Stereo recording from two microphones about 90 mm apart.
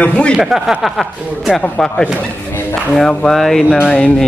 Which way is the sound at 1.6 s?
10° left (ahead or behind).